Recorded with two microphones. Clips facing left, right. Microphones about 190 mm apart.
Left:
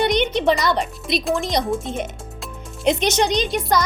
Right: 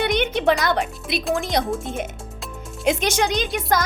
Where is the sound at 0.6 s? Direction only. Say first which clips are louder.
Left 1 dB; 55° right (ahead or behind).